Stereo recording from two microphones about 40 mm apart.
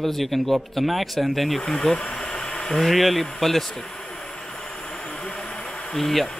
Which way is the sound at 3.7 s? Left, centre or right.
Centre.